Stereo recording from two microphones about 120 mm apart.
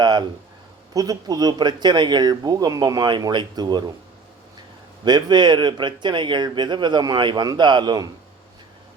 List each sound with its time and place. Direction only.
0.0 s speech: 35° right (ahead or behind)
5.0 s speech: 35° right (ahead or behind)